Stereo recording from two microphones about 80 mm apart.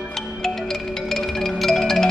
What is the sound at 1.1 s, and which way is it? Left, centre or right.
Music, centre.